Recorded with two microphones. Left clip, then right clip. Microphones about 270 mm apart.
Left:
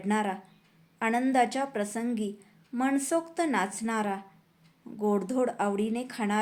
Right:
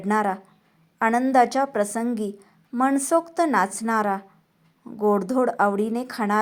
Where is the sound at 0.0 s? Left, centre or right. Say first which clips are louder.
Right 7 dB; centre.